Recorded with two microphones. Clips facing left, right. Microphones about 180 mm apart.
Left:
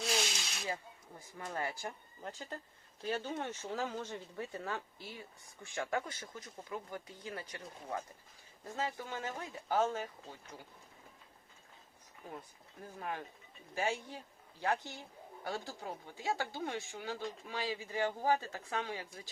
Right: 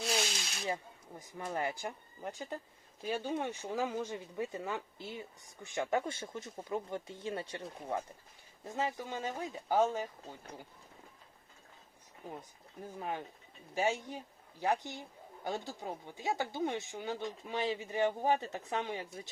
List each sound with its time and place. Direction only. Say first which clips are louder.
0.0 s snake: right 1 dB; centre (ahead or behind)
1.5 s speech: right 3 dB; 20° right (ahead or behind)
8.6 s speech: right 3 dB; 15° right (ahead or behind)
13.0 s speech: right 2 dB; 20° right (ahead or behind)